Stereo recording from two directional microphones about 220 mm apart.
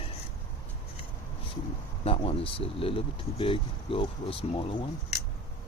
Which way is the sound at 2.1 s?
25° left (ahead or behind).